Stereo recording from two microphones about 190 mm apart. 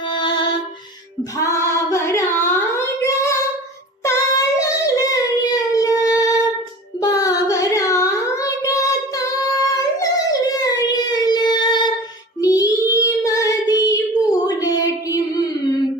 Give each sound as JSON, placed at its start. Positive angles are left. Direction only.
{"t": 0.1, "sound": "music", "side_deg": 25}
{"t": 1.4, "sound": "singing", "side_deg": 15}
{"t": 4.0, "sound": "child singing", "side_deg": 15}